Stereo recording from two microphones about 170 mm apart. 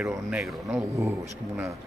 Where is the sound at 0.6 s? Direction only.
15° right (ahead or behind).